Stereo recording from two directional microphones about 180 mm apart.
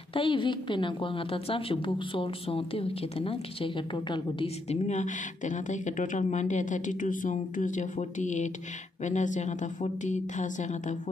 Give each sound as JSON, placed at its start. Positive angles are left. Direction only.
{"t": 0.1, "sound": "a woman's voice", "side_deg": 30}